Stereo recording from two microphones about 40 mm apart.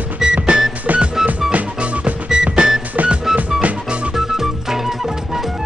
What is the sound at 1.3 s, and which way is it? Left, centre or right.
Music, right.